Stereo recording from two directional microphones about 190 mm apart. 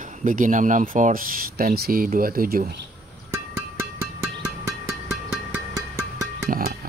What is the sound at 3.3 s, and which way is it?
Music, 15° right (ahead or behind).